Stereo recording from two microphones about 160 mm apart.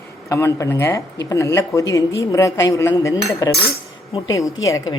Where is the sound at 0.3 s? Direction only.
20° left (ahead or behind).